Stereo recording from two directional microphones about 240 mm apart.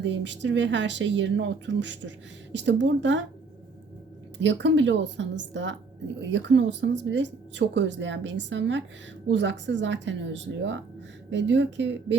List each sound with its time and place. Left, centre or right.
0.0 s speech: right
4.4 s speech: right